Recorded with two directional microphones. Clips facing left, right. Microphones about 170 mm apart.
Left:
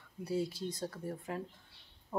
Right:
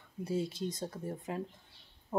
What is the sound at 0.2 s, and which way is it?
Speech, 20° right (ahead or behind).